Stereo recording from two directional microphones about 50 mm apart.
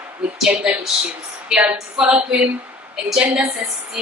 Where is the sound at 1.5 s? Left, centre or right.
Centre.